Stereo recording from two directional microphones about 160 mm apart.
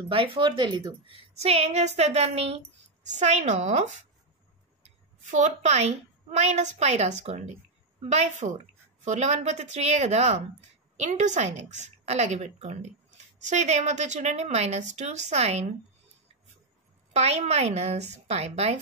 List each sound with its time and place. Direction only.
0.1 s a child's voice: 35° right (ahead or behind)
5.2 s a woman's voice: 50° right (ahead or behind)
17.1 s a child's voice: 40° right (ahead or behind)